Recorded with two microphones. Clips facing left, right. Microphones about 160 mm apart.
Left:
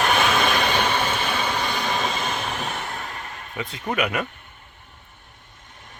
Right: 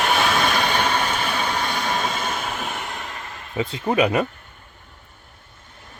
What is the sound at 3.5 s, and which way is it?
Speech, 30° right (ahead or behind).